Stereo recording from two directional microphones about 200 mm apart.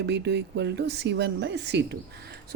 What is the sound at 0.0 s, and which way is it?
Speech, 60° right (ahead or behind).